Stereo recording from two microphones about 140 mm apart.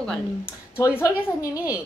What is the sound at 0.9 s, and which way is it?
Speech, 25° left (ahead or behind).